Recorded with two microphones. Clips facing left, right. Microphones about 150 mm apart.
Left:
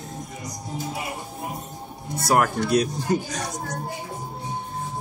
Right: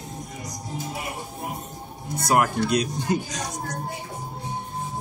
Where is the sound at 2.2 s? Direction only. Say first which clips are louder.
Even; 15° right (ahead or behind).